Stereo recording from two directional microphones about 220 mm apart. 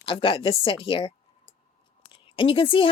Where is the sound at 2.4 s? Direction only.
25° left (ahead or behind).